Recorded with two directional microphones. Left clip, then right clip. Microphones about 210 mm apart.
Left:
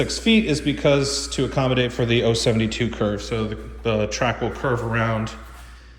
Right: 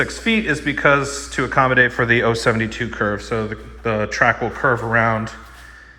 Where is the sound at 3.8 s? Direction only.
30° right (ahead or behind).